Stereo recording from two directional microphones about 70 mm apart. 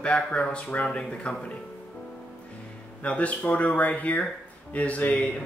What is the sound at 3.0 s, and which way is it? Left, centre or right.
Speech, centre.